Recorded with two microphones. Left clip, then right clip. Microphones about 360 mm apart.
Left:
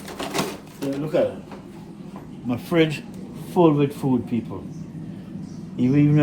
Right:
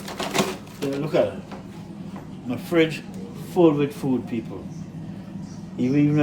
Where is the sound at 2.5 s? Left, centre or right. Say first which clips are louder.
Even; centre.